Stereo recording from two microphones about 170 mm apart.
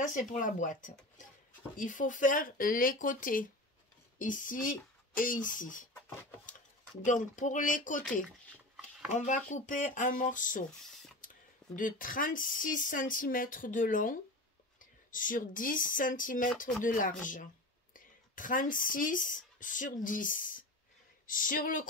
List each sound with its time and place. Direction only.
0.0 s speech: 50° left (ahead or behind)
7.1 s speech: 50° left (ahead or behind)
9.1 s speech: 45° left (ahead or behind)